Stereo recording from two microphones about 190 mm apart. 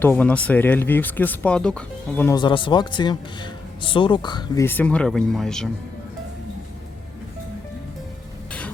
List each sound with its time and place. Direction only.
0.0 s speech: 10° left (ahead or behind)
2.3 s speech: 25° left (ahead or behind)
4.6 s speech: 10° left (ahead or behind)